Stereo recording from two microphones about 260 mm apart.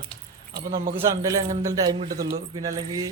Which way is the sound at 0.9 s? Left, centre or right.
Centre.